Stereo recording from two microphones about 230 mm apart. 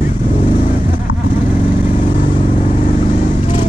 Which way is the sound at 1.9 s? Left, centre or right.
Left.